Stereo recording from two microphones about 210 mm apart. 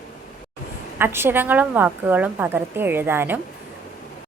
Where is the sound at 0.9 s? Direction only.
10° right (ahead or behind).